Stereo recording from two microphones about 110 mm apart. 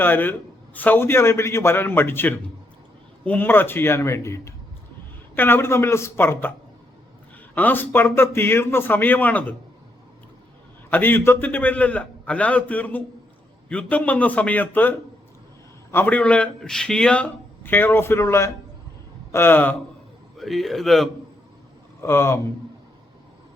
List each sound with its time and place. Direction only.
0.0 s a man's voice: 15° left (ahead or behind)
7.5 s a man's voice: 15° left (ahead or behind)
10.8 s a man's voice: 20° left (ahead or behind)
20.4 s speech: centre (ahead or behind)
22.0 s a man's voice: 25° left (ahead or behind)